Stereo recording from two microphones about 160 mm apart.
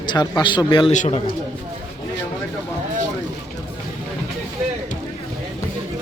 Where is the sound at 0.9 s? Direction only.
45° left (ahead or behind).